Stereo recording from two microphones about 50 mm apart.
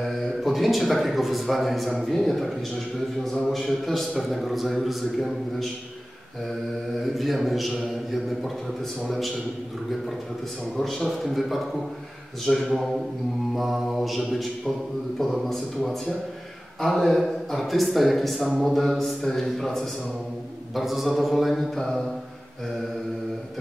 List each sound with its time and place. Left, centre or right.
0.0 s speech: centre
7.2 s speech: centre
10.8 s speech: centre
20.7 s speech: centre